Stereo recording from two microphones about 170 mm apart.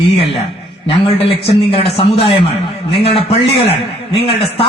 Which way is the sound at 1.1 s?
30° left (ahead or behind).